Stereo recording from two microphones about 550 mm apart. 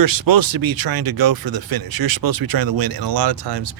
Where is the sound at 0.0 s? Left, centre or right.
Right.